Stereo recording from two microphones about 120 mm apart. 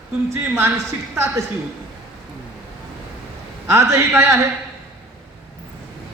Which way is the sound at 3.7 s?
20° right (ahead or behind).